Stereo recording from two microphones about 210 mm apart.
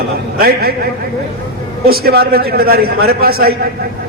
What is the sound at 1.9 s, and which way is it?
A man's voice, 45° right (ahead or behind).